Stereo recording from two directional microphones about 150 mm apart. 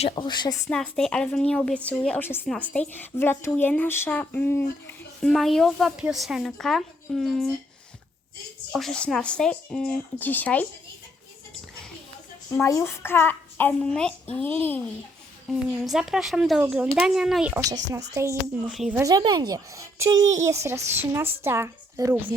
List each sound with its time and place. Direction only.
0.0 s a woman's voice: 30° left (ahead or behind)
0.7 s speech: 5° left (ahead or behind)
5.2 s speech: centre (ahead or behind)
8.7 s speech: 5° left (ahead or behind)
12.5 s speech: 20° left (ahead or behind)
15.5 s speech: 5° right (ahead or behind)
17.5 s a woman's voice: 20° right (ahead or behind)
18.7 s speech: centre (ahead or behind)
18.9 s a woman's voice: 25° right (ahead or behind)